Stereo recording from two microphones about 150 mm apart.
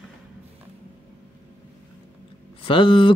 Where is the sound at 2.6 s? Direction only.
35° left (ahead or behind).